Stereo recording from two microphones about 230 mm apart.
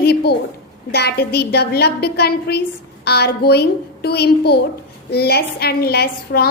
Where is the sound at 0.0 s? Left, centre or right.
Left.